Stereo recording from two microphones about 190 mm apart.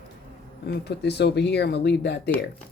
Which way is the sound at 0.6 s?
60° left (ahead or behind).